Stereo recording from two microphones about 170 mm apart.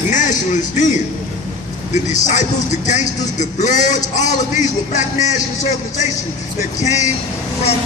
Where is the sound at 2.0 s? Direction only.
45° left (ahead or behind).